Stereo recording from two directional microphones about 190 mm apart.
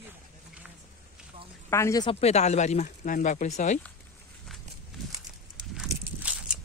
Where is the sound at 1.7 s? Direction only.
15° left (ahead or behind).